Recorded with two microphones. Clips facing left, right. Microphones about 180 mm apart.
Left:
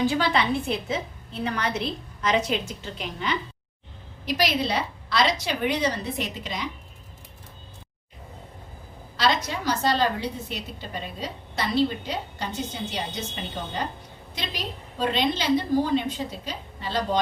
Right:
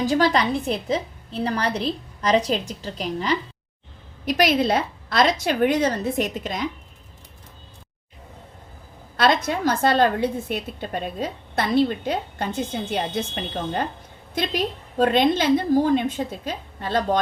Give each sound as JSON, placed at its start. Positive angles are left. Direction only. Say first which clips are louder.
{"t": 0.0, "sound": "a woman's voice", "louder": "right 3 dB", "side_deg": -40}
{"t": 4.3, "sound": "a woman's voice", "louder": "right 5 dB", "side_deg": -50}
{"t": 9.1, "sound": "a woman's voice", "louder": "right 5 dB", "side_deg": -55}
{"t": 14.3, "sound": "a woman's voice", "louder": "right 9 dB", "side_deg": -50}